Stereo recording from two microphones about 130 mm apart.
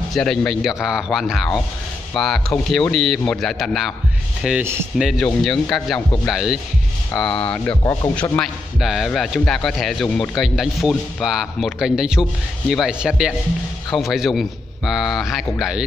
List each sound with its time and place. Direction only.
0.1 s a man's voice: 5° left (ahead or behind)
7.8 s speech: 25° left (ahead or behind)
8.2 s a man's voice: centre (ahead or behind)
10.3 s a man's voice: centre (ahead or behind)